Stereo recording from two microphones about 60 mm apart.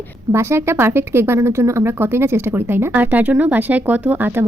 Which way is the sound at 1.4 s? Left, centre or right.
Right.